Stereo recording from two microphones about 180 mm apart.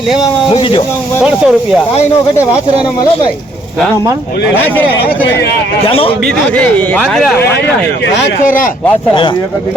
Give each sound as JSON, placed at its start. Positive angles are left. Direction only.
{"t": 0.5, "sound": "speech", "side_deg": 30}
{"t": 1.2, "sound": "a man's voice", "side_deg": -5}
{"t": 5.9, "sound": "a man's voice", "side_deg": 30}
{"t": 6.2, "sound": "a man's voice", "side_deg": 5}